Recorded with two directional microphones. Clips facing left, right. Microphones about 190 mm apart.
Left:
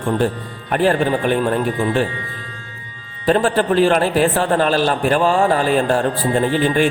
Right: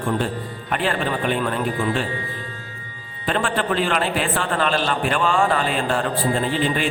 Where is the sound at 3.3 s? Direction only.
40° left (ahead or behind).